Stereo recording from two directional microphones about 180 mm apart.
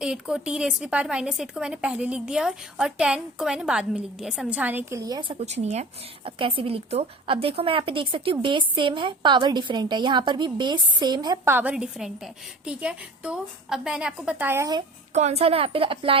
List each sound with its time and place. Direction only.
0.0 s speech: 5° right (ahead or behind); by 5.4 s 20° right (ahead or behind)
5.4 s speech: 35° right (ahead or behind)
11.5 s speech: 5° right (ahead or behind)
15.1 s a woman's voice: 40° right (ahead or behind)